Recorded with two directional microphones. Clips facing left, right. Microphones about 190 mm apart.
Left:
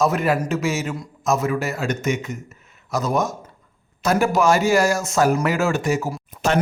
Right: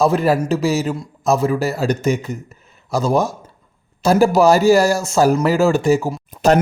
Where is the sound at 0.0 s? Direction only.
30° right (ahead or behind).